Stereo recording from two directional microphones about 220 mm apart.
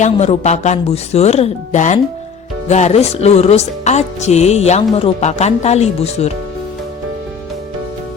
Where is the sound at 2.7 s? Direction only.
30° left (ahead or behind).